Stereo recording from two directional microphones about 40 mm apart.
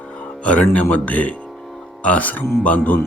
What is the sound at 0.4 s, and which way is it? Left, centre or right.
Speech, left.